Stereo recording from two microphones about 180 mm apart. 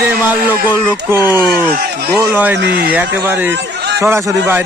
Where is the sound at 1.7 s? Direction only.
55° right (ahead or behind).